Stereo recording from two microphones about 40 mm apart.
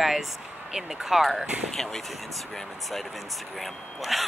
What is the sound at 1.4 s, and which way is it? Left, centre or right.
Speech, right.